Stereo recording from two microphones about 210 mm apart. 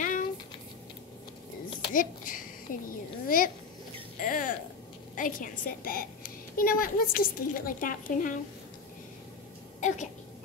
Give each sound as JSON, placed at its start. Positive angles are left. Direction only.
{"t": 0.0, "sound": "a sound", "side_deg": 40}
{"t": 2.0, "sound": "a woman's voice", "side_deg": 40}
{"t": 9.8, "sound": "speech", "side_deg": 35}